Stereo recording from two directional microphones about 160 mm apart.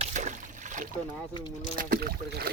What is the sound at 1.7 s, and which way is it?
Speech, 70° right (ahead or behind).